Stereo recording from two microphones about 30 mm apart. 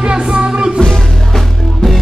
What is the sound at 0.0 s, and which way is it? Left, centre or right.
Music, right.